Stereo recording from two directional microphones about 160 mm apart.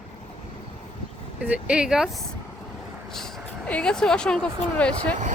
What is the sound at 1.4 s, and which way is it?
Speech, 5° right (ahead or behind).